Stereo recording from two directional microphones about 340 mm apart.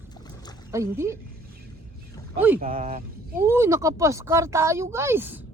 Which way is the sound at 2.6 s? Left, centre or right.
Right.